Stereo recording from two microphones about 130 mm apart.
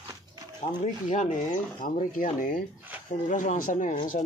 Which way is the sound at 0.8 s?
70° left (ahead or behind).